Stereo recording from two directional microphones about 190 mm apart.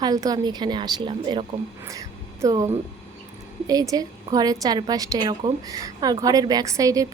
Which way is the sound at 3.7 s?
20° right (ahead or behind).